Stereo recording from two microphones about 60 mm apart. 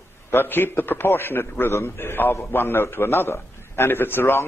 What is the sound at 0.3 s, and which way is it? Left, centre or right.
A man's voice, left.